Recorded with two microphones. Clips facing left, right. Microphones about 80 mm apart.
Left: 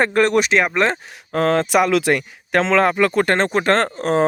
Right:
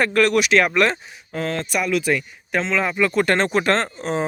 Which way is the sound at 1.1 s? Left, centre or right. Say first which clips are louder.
Left 8 dB; left.